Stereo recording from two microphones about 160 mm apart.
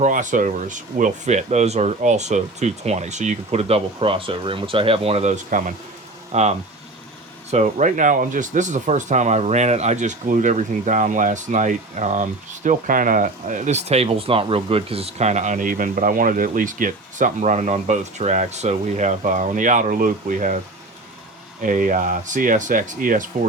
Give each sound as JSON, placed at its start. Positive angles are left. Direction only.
{"t": 0.0, "sound": "speech", "side_deg": -50}
{"t": 5.5, "sound": "speech", "side_deg": -55}
{"t": 6.3, "sound": "speech", "side_deg": -45}
{"t": 21.6, "sound": "speech", "side_deg": -55}